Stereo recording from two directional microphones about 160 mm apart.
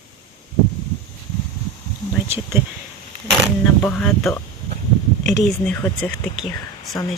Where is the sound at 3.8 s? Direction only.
5° left (ahead or behind).